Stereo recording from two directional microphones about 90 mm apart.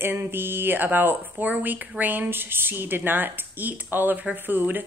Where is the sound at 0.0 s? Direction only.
25° right (ahead or behind).